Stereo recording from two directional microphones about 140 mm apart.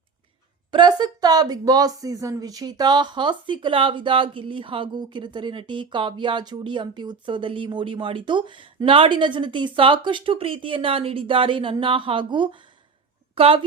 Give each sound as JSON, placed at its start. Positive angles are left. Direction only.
{"t": 0.7, "sound": "speech", "side_deg": -30}